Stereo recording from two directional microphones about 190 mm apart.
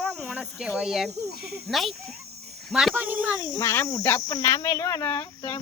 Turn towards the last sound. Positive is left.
turn(degrees=20)  # may be behind; listen again after turning